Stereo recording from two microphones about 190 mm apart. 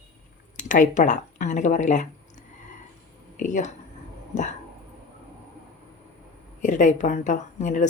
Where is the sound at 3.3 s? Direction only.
40° left (ahead or behind).